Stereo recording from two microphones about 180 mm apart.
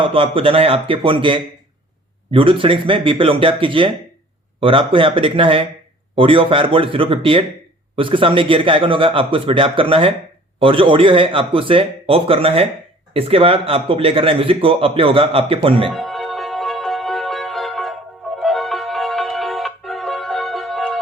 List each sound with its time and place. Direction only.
0.0 s a man's voice: 30° right (ahead or behind)
15.9 s music: centre (ahead or behind)